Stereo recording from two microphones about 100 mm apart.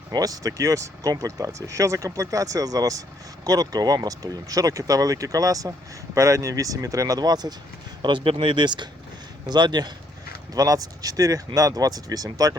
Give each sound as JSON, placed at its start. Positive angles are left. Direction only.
{"t": 0.1, "sound": "speech", "side_deg": -35}
{"t": 8.0, "sound": "speech", "side_deg": -60}